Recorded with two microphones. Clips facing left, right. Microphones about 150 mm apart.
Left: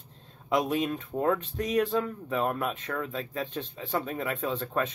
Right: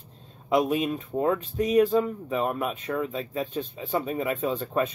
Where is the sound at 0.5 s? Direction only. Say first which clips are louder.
Right 3 dB; 5° right (ahead or behind).